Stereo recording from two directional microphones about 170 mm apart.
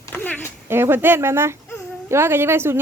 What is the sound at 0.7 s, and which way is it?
A woman's voice, 15° right (ahead or behind).